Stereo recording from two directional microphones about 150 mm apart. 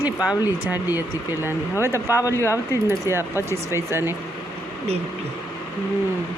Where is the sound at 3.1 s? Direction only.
15° right (ahead or behind).